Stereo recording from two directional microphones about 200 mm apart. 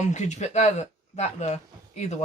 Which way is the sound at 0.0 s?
35° left (ahead or behind).